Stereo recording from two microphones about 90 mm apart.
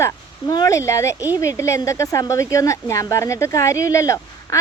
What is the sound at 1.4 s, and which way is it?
Speech, 35° left (ahead or behind).